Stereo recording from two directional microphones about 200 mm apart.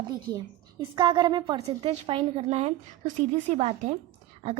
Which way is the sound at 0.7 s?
20° right (ahead or behind).